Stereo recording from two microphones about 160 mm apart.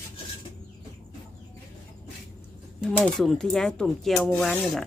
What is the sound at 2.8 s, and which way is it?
Speech, 5° left (ahead or behind).